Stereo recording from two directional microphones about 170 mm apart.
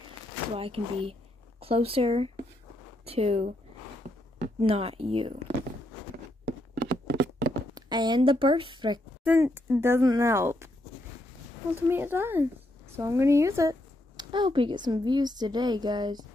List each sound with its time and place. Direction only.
0.6 s speech: 35° right (ahead or behind)
6.4 s a sound: 80° right
7.7 s speech: 25° right (ahead or behind)
9.2 s speech: 10° right (ahead or behind)
11.7 s speech: 10° right (ahead or behind)